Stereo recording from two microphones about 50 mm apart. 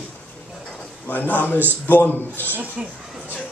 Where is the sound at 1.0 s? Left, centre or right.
Left.